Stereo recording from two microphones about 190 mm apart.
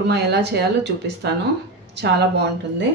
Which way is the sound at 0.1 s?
60° right (ahead or behind).